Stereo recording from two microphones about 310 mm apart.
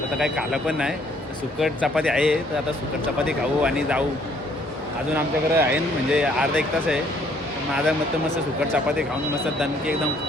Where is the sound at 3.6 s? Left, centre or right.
Centre.